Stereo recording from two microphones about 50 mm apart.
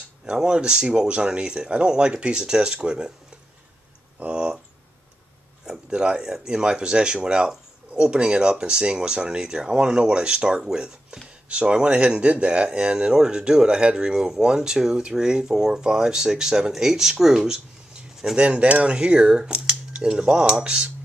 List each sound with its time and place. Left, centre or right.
0.2 s speech: centre
4.2 s a sound: right
5.7 s speech: centre
18.3 s speech: right